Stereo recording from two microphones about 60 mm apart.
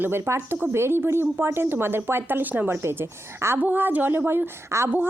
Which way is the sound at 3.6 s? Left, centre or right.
Right.